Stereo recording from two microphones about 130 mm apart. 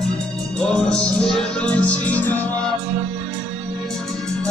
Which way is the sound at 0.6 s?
5° left (ahead or behind).